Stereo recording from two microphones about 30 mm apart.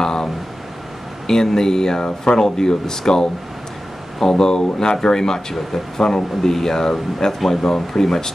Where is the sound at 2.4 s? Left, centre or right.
Centre.